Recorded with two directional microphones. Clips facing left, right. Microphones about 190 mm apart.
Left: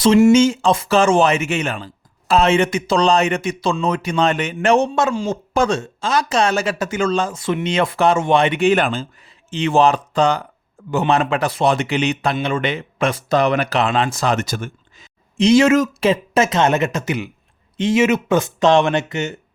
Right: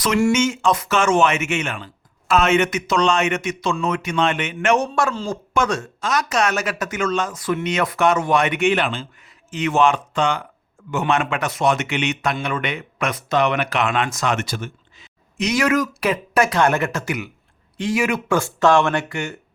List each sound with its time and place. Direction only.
0.0 s speech: 25° left (ahead or behind)
4.9 s speech: 15° left (ahead or behind)
8.7 s speech: 45° left (ahead or behind)
9.5 s speech: 30° left (ahead or behind); by 15.0 s 45° left (ahead or behind)
15.4 s speech: 30° left (ahead or behind)